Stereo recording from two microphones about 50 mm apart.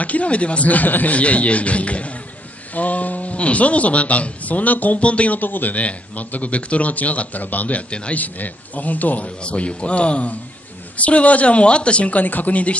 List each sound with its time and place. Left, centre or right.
0.0 s a man's voice: left
5.4 s a man's voice: left
9.4 s a man's voice: left